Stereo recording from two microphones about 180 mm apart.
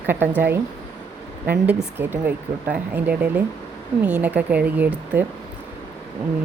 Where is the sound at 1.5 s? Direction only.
10° right (ahead or behind).